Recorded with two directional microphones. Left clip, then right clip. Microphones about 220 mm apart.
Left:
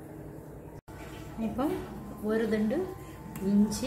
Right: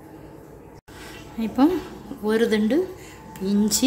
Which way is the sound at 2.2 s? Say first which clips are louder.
Right 8 dB; 50° right (ahead or behind).